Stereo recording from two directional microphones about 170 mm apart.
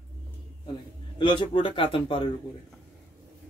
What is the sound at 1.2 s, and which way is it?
Speech, 30° left (ahead or behind).